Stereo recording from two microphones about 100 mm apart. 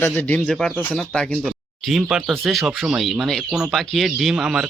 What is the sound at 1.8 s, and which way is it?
Speech, 5° right (ahead or behind).